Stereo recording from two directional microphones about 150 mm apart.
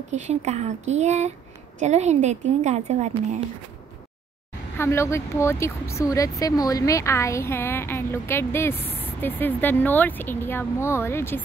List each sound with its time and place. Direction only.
0.1 s a woman's voice: 50° right (ahead or behind)
4.7 s a woman's voice: 20° left (ahead or behind)